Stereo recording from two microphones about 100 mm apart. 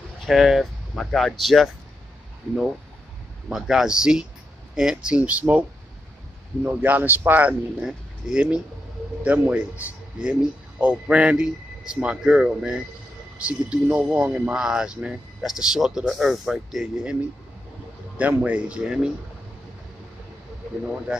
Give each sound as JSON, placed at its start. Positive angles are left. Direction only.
{"t": 0.3, "sound": "speech", "side_deg": 0}
{"t": 3.4, "sound": "speech", "side_deg": -5}
{"t": 7.8, "sound": "speech", "side_deg": -5}